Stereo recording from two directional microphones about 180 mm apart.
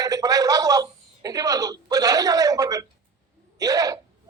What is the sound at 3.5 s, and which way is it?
Hiccup, 20° right (ahead or behind).